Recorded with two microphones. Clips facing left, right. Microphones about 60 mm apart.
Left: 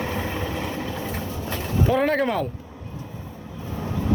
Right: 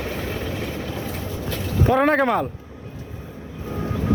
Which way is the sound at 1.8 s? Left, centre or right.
Right.